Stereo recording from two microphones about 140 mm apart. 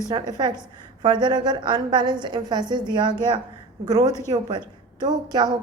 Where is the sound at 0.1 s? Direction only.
30° right (ahead or behind).